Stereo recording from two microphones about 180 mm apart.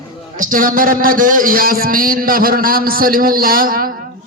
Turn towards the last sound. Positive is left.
turn(degrees=-50)  # may be behind; listen again after turning